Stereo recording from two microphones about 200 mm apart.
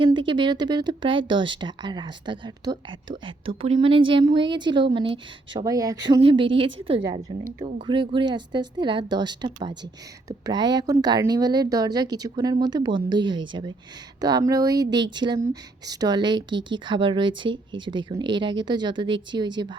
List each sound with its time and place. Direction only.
0.0 s a woman's voice: 25° right (ahead or behind)